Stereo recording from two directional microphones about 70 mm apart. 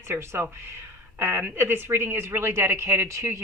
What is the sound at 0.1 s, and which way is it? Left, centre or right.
A woman's voice, right.